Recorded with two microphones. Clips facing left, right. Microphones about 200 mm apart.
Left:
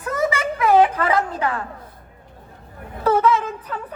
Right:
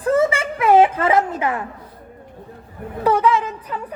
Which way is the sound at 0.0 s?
30° right (ahead or behind).